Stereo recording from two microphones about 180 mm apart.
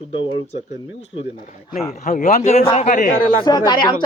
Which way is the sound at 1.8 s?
40° left (ahead or behind).